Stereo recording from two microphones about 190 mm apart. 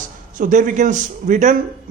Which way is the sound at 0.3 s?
45° right (ahead or behind).